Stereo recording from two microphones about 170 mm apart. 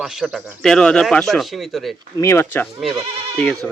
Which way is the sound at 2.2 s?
15° left (ahead or behind).